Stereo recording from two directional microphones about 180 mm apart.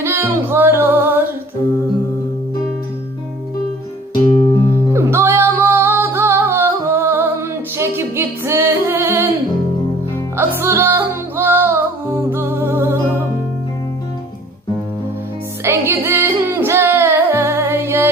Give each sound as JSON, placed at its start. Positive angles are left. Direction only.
{"t": 0.0, "sound": "music", "side_deg": -15}
{"t": 4.1, "sound": "music", "side_deg": 35}
{"t": 4.9, "sound": "music", "side_deg": -15}
{"t": 10.3, "sound": "music", "side_deg": -10}
{"t": 15.6, "sound": "music", "side_deg": -15}